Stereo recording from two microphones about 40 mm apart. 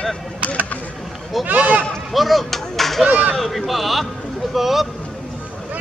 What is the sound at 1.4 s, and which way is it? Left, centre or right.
Speech, right.